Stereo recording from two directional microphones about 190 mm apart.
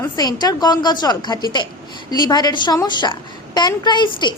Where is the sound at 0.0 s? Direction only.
20° left (ahead or behind).